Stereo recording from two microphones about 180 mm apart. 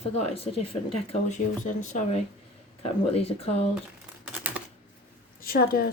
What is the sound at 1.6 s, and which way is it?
Speech, 45° left (ahead or behind).